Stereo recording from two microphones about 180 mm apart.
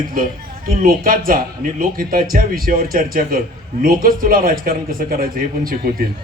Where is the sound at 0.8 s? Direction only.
50° right (ahead or behind).